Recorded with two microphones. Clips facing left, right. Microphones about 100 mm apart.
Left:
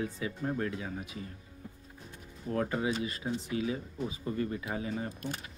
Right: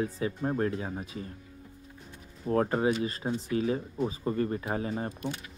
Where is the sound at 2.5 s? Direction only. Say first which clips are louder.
Right 5 dB; 40° right (ahead or behind).